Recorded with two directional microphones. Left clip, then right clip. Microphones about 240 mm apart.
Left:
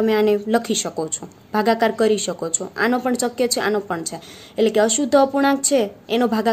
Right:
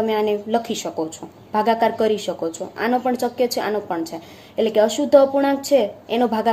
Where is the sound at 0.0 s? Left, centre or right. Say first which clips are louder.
Left 3 dB; left.